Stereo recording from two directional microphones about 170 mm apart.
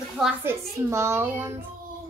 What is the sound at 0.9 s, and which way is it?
Speech, 15° right (ahead or behind).